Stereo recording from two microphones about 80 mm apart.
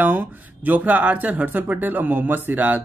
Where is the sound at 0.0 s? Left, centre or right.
Right.